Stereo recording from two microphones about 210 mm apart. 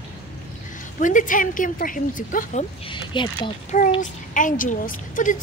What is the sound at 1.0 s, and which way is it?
A woman's voice, 40° left (ahead or behind).